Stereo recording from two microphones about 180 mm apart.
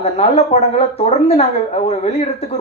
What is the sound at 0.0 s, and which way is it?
A woman's voice, 35° left (ahead or behind).